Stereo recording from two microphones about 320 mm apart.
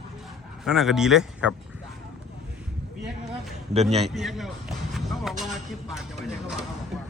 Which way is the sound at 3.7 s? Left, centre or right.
Centre.